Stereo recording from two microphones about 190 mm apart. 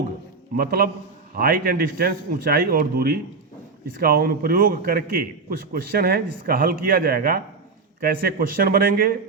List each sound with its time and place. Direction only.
0.5 s a man's voice: 50° right (ahead or behind)